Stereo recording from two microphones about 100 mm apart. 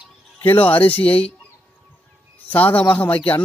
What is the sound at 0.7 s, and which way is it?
Speech, 15° left (ahead or behind).